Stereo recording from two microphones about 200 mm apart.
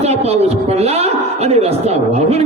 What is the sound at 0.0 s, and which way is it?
Speech, 30° right (ahead or behind).